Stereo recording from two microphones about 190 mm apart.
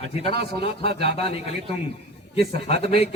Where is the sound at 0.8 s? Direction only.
60° right (ahead or behind).